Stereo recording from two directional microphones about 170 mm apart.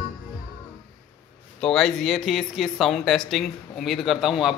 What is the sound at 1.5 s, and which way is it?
Speech, 5° left (ahead or behind).